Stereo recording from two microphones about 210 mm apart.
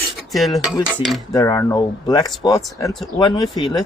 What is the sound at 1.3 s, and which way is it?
Speech, 15° left (ahead or behind).